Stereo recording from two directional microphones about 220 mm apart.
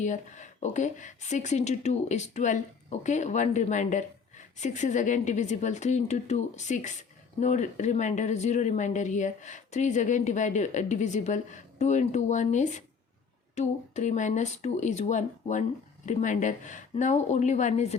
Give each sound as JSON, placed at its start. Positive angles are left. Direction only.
{"t": 0.0, "sound": "speech", "side_deg": 35}